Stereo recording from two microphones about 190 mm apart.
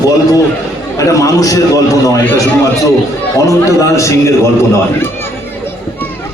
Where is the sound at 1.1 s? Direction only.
20° left (ahead or behind).